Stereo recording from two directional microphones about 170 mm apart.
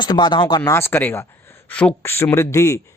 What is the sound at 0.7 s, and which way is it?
A man's voice, 15° left (ahead or behind).